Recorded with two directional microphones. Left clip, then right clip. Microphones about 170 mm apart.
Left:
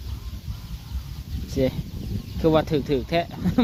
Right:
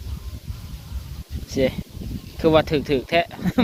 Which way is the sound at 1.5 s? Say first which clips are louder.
Right 3 dB; centre (ahead or behind).